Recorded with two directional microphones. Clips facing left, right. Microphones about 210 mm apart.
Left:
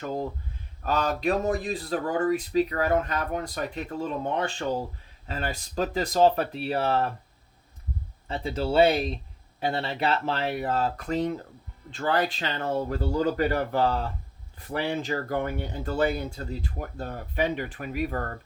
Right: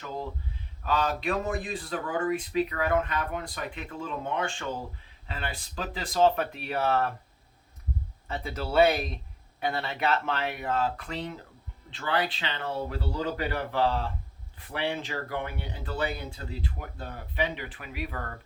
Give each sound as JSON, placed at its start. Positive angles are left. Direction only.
{"t": 0.9, "sound": "speech", "side_deg": 45}
{"t": 8.3, "sound": "speech", "side_deg": 30}